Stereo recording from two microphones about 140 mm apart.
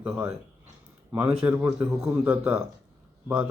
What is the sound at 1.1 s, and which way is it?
Speech, 10° right (ahead or behind).